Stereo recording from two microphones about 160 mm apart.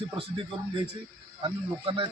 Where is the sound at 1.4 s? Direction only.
35° right (ahead or behind).